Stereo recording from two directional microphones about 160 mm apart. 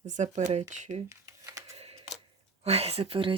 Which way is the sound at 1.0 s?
20° right (ahead or behind).